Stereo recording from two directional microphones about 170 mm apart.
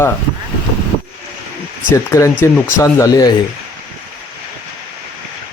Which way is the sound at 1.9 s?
15° left (ahead or behind).